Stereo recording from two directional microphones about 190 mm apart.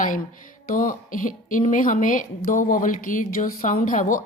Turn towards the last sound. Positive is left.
turn(degrees=45)  # may be behind; listen again after turning